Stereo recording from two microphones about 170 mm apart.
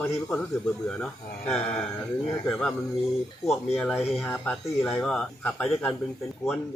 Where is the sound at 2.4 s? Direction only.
5° left (ahead or behind).